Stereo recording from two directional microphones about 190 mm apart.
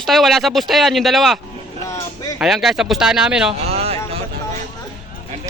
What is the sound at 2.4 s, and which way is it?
A man's voice, centre (ahead or behind).